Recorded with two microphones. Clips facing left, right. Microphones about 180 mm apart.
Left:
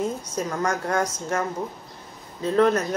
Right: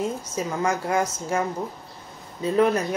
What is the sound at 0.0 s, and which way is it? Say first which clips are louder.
Speech: even; 5° right (ahead or behind).